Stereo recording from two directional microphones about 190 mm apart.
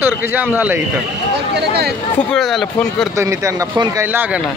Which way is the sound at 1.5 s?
60° right (ahead or behind).